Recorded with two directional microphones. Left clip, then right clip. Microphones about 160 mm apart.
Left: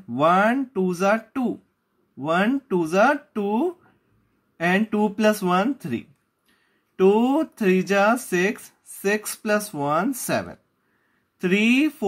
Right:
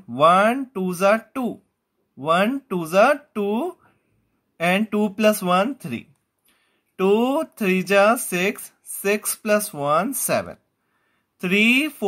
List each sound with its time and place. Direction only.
0.1 s speech: 30° right (ahead or behind)